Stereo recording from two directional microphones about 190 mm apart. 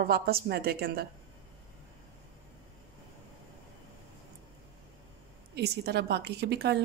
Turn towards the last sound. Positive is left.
turn(degrees=-60)  # may be behind; listen again after turning